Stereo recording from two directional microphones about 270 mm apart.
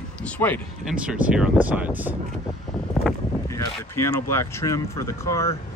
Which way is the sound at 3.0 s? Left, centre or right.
Centre.